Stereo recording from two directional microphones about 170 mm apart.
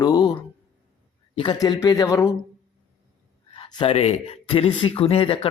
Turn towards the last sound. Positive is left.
turn(degrees=35)  # may be behind; listen again after turning